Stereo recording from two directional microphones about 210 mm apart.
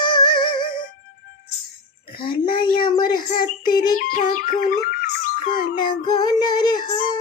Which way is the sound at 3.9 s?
40° left (ahead or behind).